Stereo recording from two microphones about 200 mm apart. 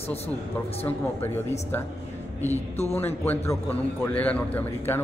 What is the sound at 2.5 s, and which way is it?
Speech, 30° left (ahead or behind).